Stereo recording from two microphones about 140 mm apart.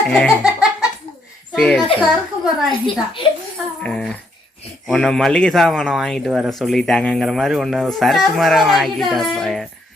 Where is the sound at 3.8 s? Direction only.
5° left (ahead or behind).